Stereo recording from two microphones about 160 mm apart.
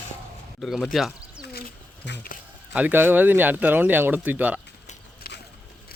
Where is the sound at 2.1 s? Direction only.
80° left.